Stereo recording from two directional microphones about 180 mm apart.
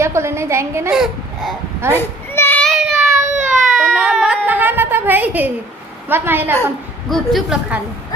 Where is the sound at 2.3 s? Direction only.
10° left (ahead or behind).